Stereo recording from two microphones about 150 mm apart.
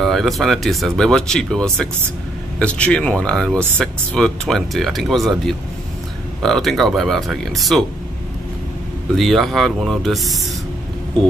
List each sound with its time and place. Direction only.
0.0 s speech: centre (ahead or behind)
9.1 s speech: centre (ahead or behind)